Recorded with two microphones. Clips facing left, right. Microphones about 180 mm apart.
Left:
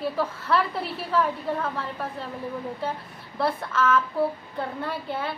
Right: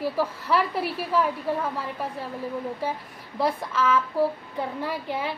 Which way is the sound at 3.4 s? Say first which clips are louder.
Even; 10° right (ahead or behind).